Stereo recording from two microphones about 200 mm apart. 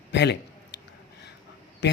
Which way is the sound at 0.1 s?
60° left (ahead or behind).